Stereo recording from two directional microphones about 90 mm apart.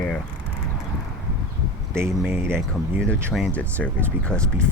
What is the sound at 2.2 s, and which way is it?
Speech, 25° right (ahead or behind).